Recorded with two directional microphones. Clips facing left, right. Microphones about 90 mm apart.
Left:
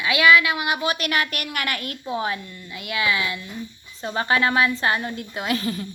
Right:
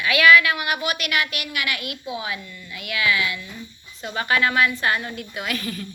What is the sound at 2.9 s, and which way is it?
A woman's voice, 25° left (ahead or behind).